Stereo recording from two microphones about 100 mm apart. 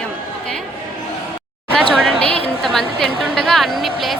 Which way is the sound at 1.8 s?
Centre (ahead or behind).